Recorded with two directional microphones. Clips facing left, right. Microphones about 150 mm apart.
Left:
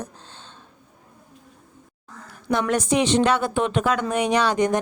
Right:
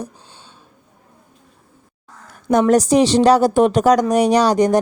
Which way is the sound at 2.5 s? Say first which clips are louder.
Right 8 dB; 40° right (ahead or behind).